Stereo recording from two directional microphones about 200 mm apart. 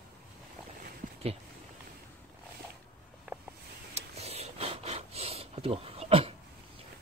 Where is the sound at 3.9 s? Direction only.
30° right (ahead or behind).